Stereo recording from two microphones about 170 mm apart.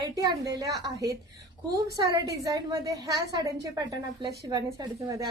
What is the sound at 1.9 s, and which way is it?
A woman's voice, 20° right (ahead or behind).